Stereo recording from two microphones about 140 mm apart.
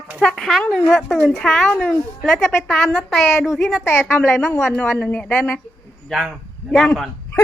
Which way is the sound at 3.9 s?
10° left (ahead or behind).